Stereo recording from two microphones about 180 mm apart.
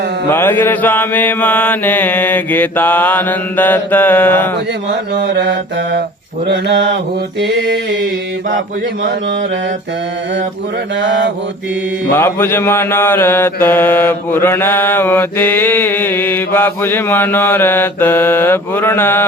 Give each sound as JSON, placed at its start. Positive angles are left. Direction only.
{"t": 0.3, "sound": "mantra", "side_deg": 10}
{"t": 4.9, "sound": "a sound", "side_deg": -70}
{"t": 12.1, "sound": "mantra", "side_deg": 10}